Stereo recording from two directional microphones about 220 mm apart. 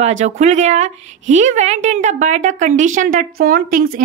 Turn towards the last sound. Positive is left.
turn(degrees=-40)  # may be behind; listen again after turning